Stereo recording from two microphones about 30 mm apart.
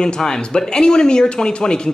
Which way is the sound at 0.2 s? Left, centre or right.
Left.